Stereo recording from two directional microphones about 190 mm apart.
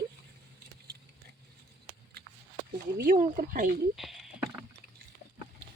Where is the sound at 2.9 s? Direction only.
45° right (ahead or behind).